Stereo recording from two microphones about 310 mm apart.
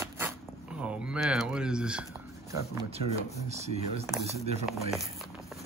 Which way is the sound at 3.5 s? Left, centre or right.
Right.